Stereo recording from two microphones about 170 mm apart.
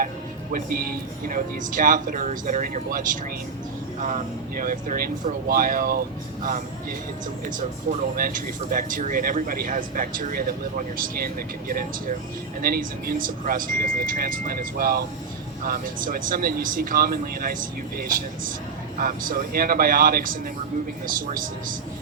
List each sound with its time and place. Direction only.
0.5 s speech: 60° right (ahead or behind)